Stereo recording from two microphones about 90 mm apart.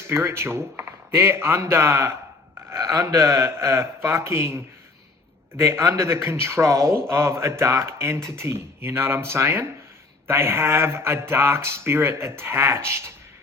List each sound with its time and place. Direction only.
0.1 s a man's voice: 30° right (ahead or behind)